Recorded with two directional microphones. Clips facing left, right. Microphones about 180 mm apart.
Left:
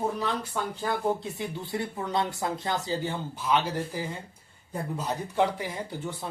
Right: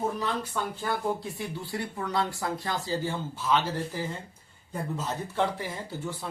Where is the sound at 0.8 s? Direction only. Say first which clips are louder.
Left 3 dB; 20° left (ahead or behind).